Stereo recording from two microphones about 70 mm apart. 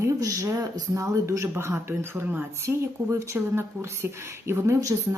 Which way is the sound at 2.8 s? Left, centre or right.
Right.